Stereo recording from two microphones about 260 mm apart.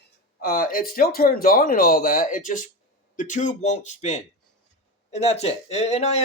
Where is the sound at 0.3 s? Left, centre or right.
Left.